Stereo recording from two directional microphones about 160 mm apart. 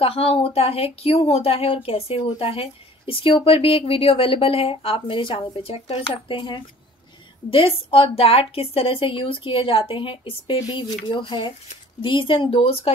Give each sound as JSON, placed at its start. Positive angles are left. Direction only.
{"t": 0.0, "sound": "speech", "side_deg": 35}